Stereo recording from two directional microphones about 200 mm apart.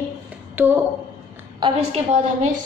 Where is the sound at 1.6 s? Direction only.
30° right (ahead or behind).